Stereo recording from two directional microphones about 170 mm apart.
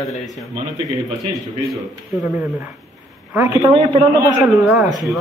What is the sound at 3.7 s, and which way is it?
Speech, 30° right (ahead or behind).